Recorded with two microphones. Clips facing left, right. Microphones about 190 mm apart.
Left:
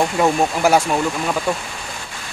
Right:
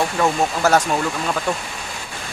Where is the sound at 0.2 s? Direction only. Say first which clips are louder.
Left 2 dB; 15° left (ahead or behind).